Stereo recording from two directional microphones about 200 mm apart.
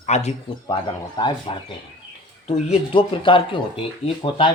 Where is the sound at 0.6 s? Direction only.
20° left (ahead or behind).